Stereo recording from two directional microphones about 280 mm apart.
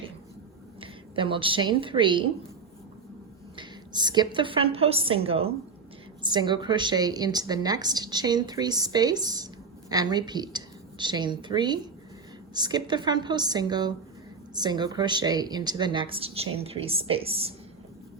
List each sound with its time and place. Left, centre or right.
0.8 s speech: centre
3.5 s a woman's voice: centre